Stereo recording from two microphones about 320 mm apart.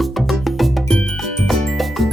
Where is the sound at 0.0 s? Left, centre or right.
Centre.